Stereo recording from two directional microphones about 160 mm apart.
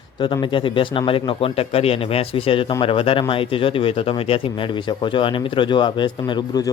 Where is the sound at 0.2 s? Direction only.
30° left (ahead or behind).